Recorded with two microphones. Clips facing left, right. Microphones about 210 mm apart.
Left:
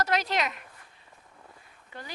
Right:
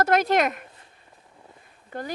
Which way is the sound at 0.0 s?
50° right (ahead or behind).